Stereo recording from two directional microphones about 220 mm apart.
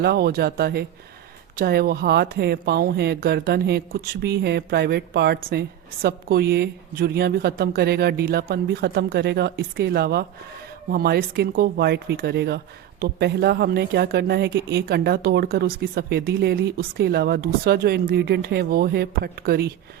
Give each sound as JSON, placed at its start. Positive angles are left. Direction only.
{"t": 0.0, "sound": "speech", "side_deg": -45}